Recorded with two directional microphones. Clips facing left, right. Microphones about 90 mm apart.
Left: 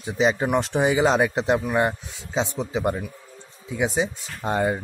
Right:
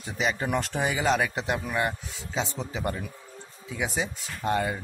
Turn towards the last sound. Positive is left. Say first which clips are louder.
# left 3 dB
turn(degrees=25)  # may be behind; listen again after turning